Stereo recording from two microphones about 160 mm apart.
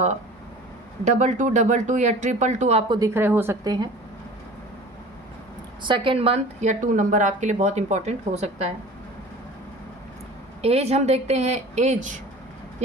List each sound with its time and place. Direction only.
1.0 s speech: 50° right (ahead or behind)
3.2 s a woman's voice: 15° right (ahead or behind)
5.8 s speech: 30° right (ahead or behind)
10.6 s speech: 40° right (ahead or behind)